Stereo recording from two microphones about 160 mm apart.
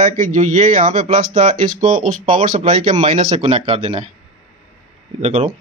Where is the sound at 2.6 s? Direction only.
40° right (ahead or behind).